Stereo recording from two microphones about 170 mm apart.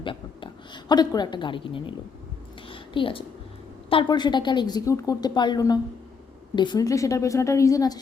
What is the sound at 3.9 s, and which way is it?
A woman's voice, 25° left (ahead or behind).